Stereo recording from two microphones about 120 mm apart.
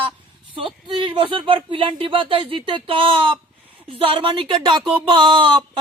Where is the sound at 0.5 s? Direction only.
45° right (ahead or behind).